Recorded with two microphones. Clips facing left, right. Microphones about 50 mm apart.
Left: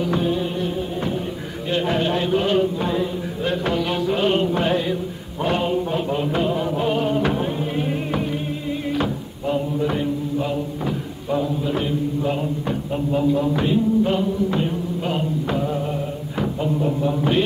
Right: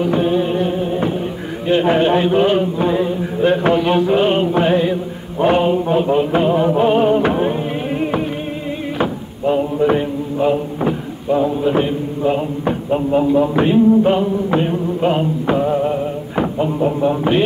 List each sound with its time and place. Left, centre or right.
0.0 s music: right
1.7 s a sound: right
5.4 s music: right
8.9 s mantra: right
11.4 s a man's voice: right